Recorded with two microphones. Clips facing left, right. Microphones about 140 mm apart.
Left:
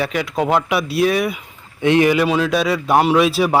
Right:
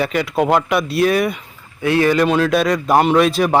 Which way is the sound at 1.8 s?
20° left (ahead or behind).